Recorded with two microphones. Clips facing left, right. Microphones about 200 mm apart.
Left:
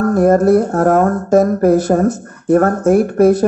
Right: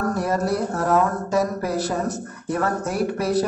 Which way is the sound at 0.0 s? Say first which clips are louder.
Left 12 dB; 50° left (ahead or behind).